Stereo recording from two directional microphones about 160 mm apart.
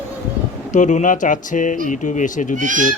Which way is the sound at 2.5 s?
55° right (ahead or behind).